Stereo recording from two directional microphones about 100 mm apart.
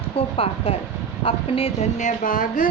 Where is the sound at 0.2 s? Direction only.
75° left (ahead or behind).